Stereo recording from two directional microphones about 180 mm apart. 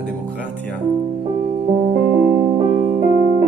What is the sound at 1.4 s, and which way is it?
Music, 35° right (ahead or behind).